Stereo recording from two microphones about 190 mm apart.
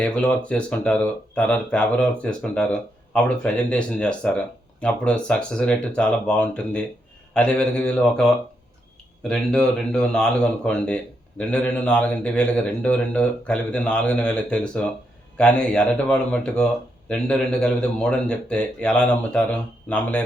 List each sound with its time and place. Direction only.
0.0 s speech: 5° left (ahead or behind)
9.3 s speech: 5° left (ahead or behind)